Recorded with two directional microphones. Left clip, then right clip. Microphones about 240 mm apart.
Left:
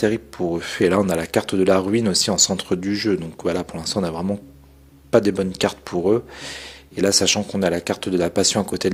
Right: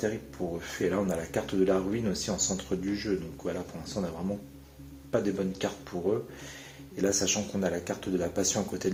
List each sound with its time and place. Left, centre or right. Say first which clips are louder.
0.0 s speech: left 11 dB; left
5.1 s speech: left 12 dB; left